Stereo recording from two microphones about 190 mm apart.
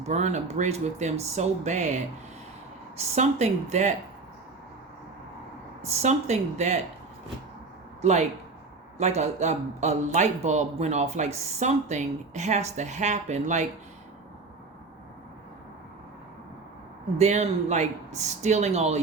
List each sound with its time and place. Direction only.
0.0 s speech: 35° right (ahead or behind)
3.2 s speech: 35° right (ahead or behind)
5.8 s speech: 35° right (ahead or behind)
9.0 s speech: 35° right (ahead or behind)
17.2 s speech: 35° right (ahead or behind)